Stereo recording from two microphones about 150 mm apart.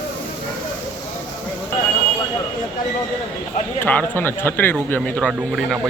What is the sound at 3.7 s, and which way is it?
Speech, 10° left (ahead or behind).